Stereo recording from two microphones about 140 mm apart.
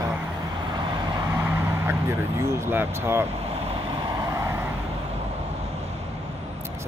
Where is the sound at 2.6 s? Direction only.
15° right (ahead or behind).